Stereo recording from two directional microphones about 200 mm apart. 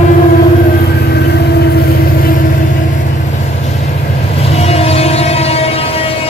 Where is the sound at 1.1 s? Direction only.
55° left (ahead or behind).